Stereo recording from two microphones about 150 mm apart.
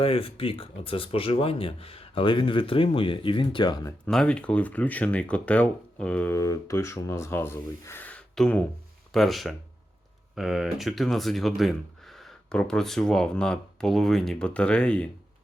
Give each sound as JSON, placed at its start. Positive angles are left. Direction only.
{"t": 0.0, "sound": "speech", "side_deg": 40}
{"t": 4.0, "sound": "speech", "side_deg": 5}
{"t": 6.3, "sound": "speech", "side_deg": 20}